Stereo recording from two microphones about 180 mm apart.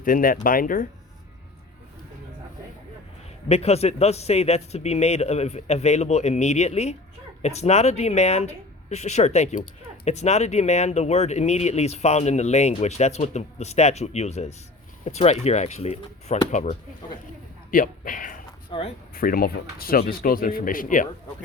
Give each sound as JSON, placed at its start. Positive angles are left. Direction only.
{"t": 0.0, "sound": "speech", "side_deg": 50}
{"t": 3.5, "sound": "a man's voice", "side_deg": 35}
{"t": 18.7, "sound": "speech", "side_deg": 30}
{"t": 19.1, "sound": "speech", "side_deg": 55}